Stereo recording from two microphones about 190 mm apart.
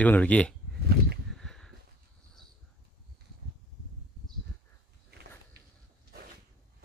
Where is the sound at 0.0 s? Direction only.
10° left (ahead or behind).